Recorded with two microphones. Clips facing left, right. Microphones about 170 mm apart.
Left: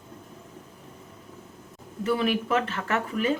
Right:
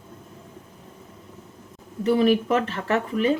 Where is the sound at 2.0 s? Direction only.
35° right (ahead or behind).